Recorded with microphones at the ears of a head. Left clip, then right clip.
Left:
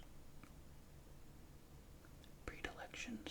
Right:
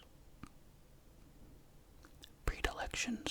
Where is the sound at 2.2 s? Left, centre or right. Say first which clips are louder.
Right 9 dB; right.